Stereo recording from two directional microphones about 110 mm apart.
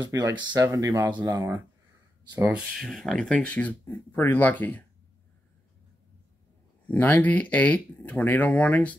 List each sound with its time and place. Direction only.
0.0 s speech: 35° right (ahead or behind)
2.3 s speech: 10° right (ahead or behind); by 4.8 s 15° left (ahead or behind)
6.9 s speech: 15° left (ahead or behind)